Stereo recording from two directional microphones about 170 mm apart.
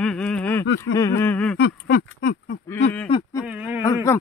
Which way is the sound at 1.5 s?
65° left (ahead or behind).